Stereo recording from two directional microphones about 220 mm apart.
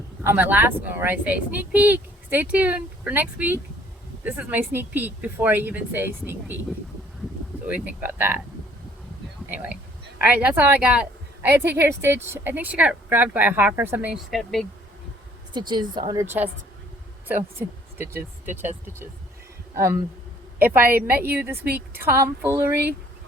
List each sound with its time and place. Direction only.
0.2 s a woman's voice: 5° right (ahead or behind)
7.7 s a woman's voice: 10° right (ahead or behind)
9.5 s a woman's voice: 10° right (ahead or behind)
15.5 s a woman's voice: 20° right (ahead or behind)
19.7 s a woman's voice: 10° right (ahead or behind)